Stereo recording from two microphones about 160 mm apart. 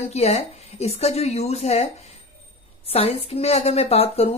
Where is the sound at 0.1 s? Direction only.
40° left (ahead or behind).